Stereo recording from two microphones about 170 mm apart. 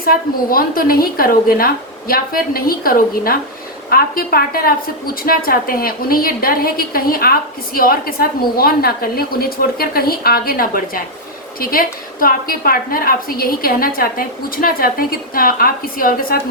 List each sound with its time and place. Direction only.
0.0 s a woman's voice: 60° left (ahead or behind)